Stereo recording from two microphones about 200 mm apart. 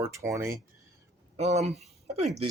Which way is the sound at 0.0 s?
15° right (ahead or behind).